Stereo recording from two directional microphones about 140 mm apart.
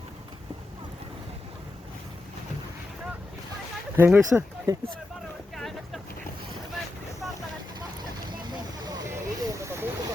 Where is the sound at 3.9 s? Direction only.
15° right (ahead or behind).